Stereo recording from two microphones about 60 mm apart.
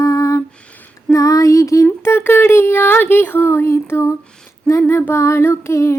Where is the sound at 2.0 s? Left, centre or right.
Left.